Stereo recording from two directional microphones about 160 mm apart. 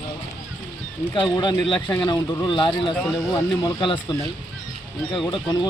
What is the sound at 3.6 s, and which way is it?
Speech, 30° left (ahead or behind).